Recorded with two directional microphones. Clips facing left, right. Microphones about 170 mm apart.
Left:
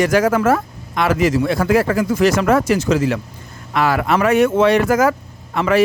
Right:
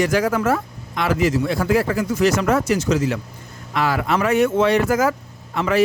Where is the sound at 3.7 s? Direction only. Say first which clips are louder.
Left 3 dB; 65° left (ahead or behind).